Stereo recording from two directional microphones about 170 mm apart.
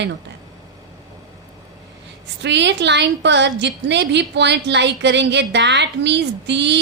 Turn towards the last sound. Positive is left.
turn(degrees=-90)